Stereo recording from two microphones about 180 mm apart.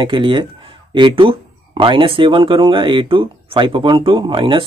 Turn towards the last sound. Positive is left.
turn(degrees=-30)  # may be behind; listen again after turning